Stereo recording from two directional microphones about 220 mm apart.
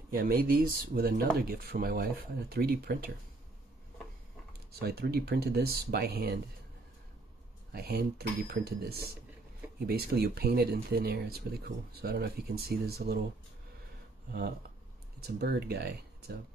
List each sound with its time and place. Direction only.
0.1 s speech: 40° right (ahead or behind)
4.7 s speech: 45° right (ahead or behind)
7.7 s speech: 45° right (ahead or behind)
15.2 s speech: 45° right (ahead or behind)